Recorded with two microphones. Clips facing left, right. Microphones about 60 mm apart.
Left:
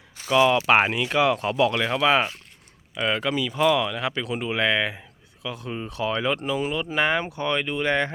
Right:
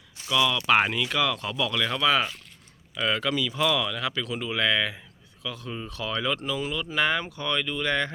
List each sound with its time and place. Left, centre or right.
0.3 s speech: left